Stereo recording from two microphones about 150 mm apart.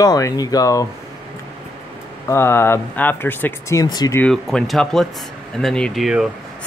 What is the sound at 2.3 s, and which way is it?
Speech, 15° left (ahead or behind).